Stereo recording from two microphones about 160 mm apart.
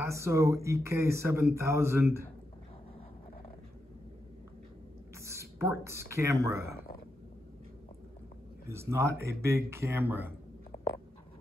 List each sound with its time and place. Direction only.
0.0 s speech: 20° right (ahead or behind)
5.2 s speech: 15° right (ahead or behind)
8.6 s speech: 15° right (ahead or behind)